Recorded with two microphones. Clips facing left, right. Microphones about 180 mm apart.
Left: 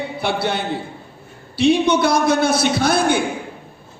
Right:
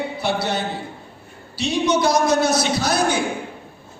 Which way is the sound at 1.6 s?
55° left (ahead or behind).